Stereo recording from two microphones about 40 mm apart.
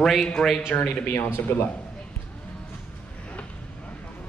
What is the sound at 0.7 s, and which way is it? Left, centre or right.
Speech, left.